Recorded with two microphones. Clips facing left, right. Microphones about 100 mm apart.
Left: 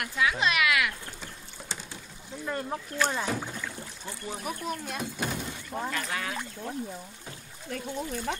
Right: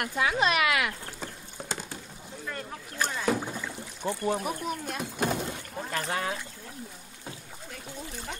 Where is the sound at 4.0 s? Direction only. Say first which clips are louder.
Right 13 dB; 65° right (ahead or behind).